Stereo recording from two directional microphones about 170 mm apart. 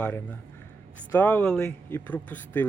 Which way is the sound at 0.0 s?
10° left (ahead or behind).